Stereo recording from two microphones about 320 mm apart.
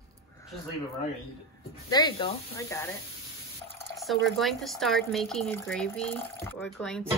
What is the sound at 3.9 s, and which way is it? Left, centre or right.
Speech, centre.